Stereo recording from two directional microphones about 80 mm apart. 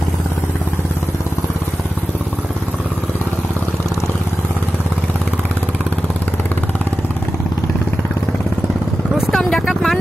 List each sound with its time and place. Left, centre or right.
9.3 s vehicle: centre